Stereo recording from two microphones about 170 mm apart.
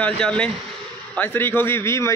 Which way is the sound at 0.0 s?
5° left (ahead or behind).